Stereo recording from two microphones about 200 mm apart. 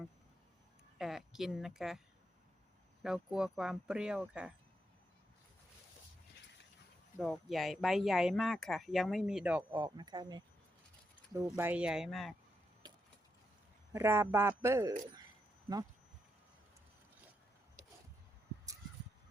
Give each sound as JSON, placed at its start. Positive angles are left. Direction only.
{"t": 0.9, "sound": "speech", "side_deg": 0}
{"t": 3.0, "sound": "speech", "side_deg": 0}
{"t": 7.2, "sound": "speech", "side_deg": 0}
{"t": 9.7, "sound": "speech", "side_deg": -20}
{"t": 13.9, "sound": "speech", "side_deg": -10}